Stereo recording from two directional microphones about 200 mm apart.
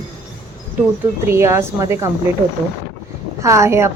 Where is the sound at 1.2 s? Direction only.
15° right (ahead or behind).